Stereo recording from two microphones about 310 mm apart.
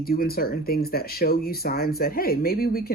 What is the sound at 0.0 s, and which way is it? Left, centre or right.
Speech, left.